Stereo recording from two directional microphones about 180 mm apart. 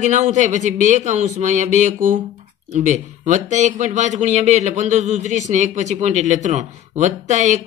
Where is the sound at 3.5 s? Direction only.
45° right (ahead or behind).